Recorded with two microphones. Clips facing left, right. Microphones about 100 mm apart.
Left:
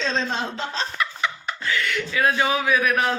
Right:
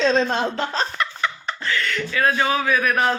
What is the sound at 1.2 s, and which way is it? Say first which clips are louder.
Speech: right 1 dB; 10° left (ahead or behind).